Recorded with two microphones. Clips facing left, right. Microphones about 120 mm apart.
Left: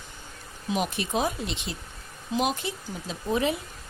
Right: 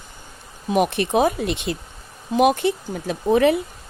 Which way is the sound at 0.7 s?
60° right (ahead or behind).